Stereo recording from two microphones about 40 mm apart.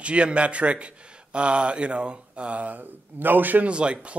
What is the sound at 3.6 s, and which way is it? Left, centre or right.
Speech, right.